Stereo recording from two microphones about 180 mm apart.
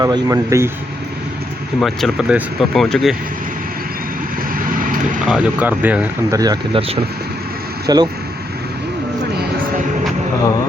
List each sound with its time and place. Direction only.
0.0 s speech: 20° right (ahead or behind)
1.8 s speech: centre (ahead or behind)
5.2 s speech: 5° right (ahead or behind)
6.4 s speech: 20° right (ahead or behind)
7.9 s speech: 20° right (ahead or behind)